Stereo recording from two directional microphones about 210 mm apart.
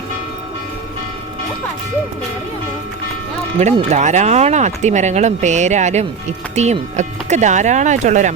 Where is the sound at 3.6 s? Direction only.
30° right (ahead or behind).